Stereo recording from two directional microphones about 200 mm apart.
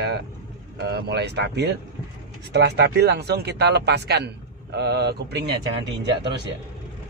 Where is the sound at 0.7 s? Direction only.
55° right (ahead or behind).